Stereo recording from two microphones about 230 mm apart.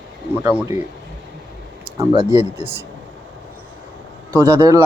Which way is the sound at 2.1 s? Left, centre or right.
Right.